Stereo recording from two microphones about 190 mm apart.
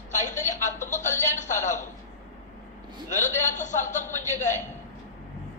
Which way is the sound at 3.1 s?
40° left (ahead or behind).